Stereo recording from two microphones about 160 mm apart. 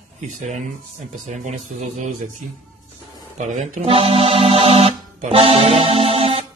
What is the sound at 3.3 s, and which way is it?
Speech, 50° right (ahead or behind).